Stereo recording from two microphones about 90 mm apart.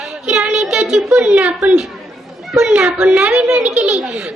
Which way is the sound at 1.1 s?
15° right (ahead or behind).